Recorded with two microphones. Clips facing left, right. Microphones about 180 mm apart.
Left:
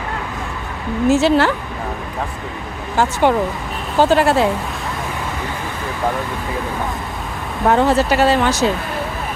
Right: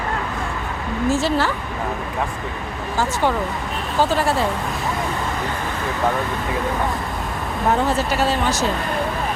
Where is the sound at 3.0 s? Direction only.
65° left (ahead or behind).